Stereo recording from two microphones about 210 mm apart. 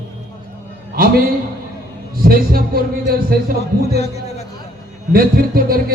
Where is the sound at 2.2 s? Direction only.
45° right (ahead or behind).